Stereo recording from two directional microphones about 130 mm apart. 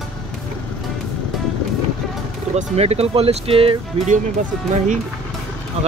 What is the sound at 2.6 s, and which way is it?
Speech, 55° right (ahead or behind).